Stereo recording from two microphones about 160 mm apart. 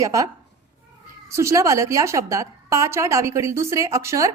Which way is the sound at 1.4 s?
20° right (ahead or behind).